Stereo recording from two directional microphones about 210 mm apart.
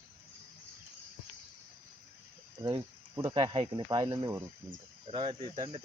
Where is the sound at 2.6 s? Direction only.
20° right (ahead or behind).